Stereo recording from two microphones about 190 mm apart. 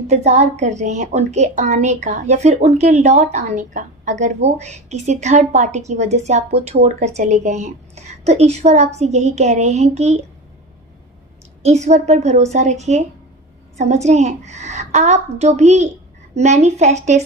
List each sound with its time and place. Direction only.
0.1 s a woman's voice: 35° right (ahead or behind)
11.6 s a woman's voice: 35° right (ahead or behind)